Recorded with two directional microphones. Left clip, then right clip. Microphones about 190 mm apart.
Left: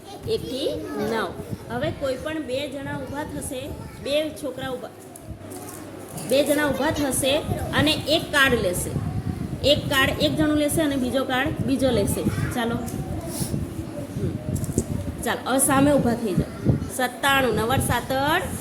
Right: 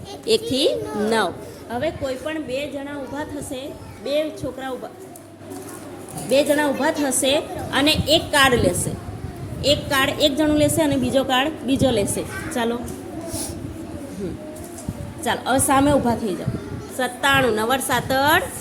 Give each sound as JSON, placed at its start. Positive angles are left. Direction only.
{"t": 0.3, "sound": "a child's voice", "side_deg": -35}
{"t": 1.7, "sound": "a woman's voice", "side_deg": -5}
{"t": 4.0, "sound": "a woman's voice", "side_deg": 0}
{"t": 6.3, "sound": "a woman's voice", "side_deg": -10}
{"t": 15.2, "sound": "a woman's voice", "side_deg": -10}